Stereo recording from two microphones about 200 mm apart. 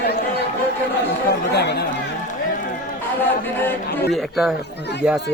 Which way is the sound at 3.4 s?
10° left (ahead or behind).